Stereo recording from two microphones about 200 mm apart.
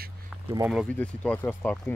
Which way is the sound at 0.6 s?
Centre (ahead or behind).